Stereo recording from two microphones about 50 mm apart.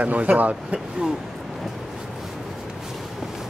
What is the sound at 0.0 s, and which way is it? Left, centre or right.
Speech, right.